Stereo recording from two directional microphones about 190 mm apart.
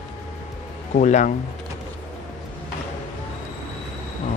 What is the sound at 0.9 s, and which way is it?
Speech, 40° left (ahead or behind).